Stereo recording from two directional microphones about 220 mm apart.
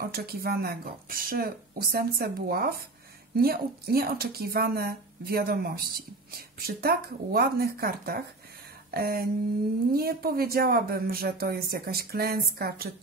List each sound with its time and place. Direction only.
0.0 s speech: 45° right (ahead or behind)